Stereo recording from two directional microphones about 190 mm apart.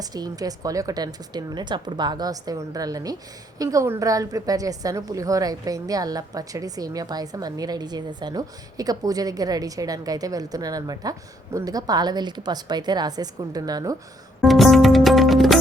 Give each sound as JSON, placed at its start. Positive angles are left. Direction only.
{"t": 0.0, "sound": "a woman's voice", "side_deg": -20}
{"t": 14.4, "sound": "music", "side_deg": 0}